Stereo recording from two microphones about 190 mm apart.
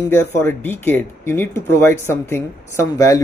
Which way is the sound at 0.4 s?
10° left (ahead or behind).